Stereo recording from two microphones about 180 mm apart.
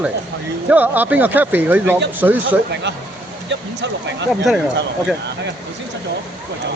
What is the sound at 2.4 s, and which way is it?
Speech, 75° right (ahead or behind).